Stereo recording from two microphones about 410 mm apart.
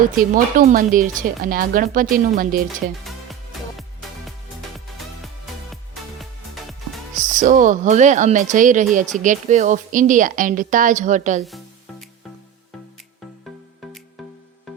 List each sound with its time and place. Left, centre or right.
0.0 s speech: centre
3.0 s music: centre
5.7 s music: centre
7.2 s speech: centre
11.4 s music: centre